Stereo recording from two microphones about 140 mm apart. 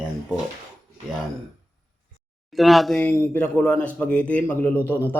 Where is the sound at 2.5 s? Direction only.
Centre (ahead or behind).